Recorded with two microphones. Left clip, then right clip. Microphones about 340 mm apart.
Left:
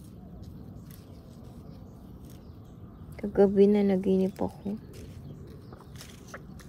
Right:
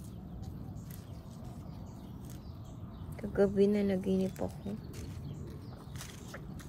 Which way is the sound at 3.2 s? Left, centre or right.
Left.